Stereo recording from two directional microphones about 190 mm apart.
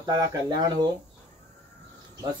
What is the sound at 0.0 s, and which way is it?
Speech, 20° right (ahead or behind).